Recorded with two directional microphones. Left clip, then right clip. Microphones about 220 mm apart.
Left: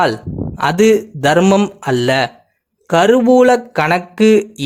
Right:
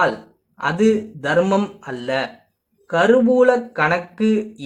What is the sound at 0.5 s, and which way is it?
Speech, 45° left (ahead or behind).